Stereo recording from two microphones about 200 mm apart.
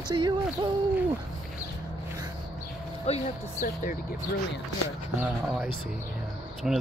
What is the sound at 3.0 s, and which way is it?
Speech, 35° left (ahead or behind).